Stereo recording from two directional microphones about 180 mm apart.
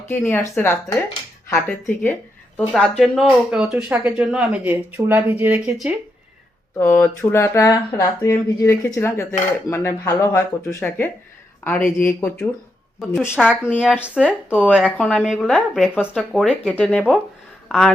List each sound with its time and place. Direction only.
0.1 s a woman's voice: 10° left (ahead or behind); by 6.0 s 5° right (ahead or behind)
6.7 s speech: 10° left (ahead or behind)
13.4 s a woman's voice: centre (ahead or behind)